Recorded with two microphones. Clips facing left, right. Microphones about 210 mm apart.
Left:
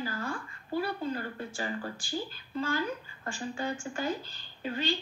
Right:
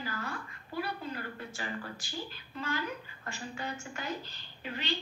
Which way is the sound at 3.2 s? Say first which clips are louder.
Left 6 dB; 30° left (ahead or behind).